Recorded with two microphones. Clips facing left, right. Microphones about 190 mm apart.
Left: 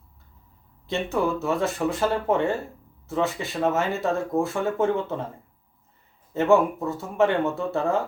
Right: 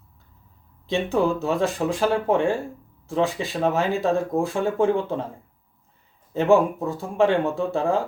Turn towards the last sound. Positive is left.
turn(degrees=-15)  # may be behind; listen again after turning